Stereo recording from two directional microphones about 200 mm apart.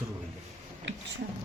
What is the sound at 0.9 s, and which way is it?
Speech, 65° right (ahead or behind).